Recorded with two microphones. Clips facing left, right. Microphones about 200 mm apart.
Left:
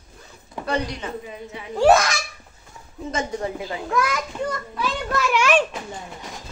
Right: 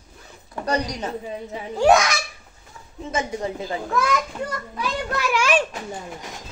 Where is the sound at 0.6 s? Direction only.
40° right (ahead or behind).